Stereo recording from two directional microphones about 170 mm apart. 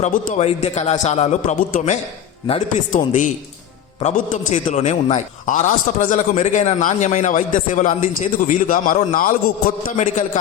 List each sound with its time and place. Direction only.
0.0 s a man's voice: 50° left (ahead or behind)
4.5 s a man's voice: 40° left (ahead or behind)